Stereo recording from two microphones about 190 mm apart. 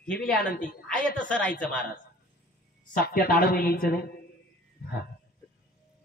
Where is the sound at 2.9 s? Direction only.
50° left (ahead or behind).